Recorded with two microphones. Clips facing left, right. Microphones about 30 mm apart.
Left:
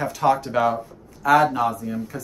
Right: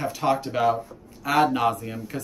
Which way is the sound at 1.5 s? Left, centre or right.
Right.